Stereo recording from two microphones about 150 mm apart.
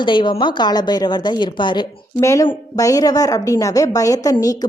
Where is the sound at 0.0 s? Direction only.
30° left (ahead or behind).